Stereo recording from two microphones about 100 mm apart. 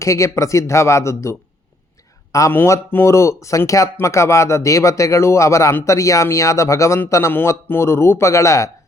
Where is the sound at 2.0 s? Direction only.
35° left (ahead or behind).